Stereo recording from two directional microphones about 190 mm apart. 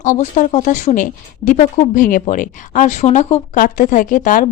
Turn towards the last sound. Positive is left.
turn(degrees=45)  # may be behind; listen again after turning